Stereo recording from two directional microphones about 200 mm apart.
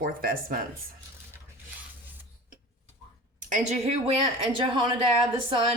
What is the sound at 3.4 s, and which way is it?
Speech, 40° right (ahead or behind).